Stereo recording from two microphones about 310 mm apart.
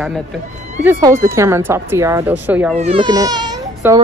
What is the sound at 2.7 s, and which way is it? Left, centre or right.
Speech, centre.